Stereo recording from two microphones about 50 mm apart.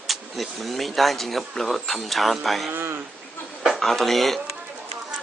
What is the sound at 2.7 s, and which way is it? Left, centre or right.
Speech, right.